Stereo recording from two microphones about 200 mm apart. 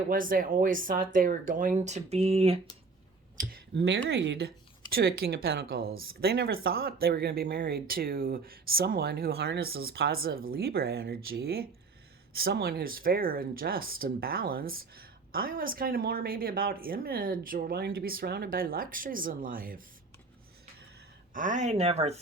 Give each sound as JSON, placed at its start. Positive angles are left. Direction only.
{"t": 0.1, "sound": "speech", "side_deg": -45}
{"t": 3.8, "sound": "speech", "side_deg": -60}
{"t": 21.3, "sound": "speech", "side_deg": -40}